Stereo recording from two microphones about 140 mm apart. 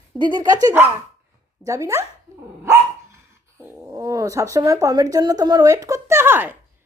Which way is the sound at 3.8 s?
25° right (ahead or behind).